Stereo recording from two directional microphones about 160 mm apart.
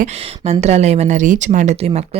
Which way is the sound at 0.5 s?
40° right (ahead or behind).